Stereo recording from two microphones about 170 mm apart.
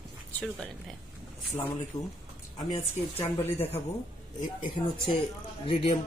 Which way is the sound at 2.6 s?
45° left (ahead or behind).